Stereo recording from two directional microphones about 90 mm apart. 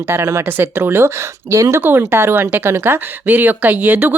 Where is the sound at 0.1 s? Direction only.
30° right (ahead or behind).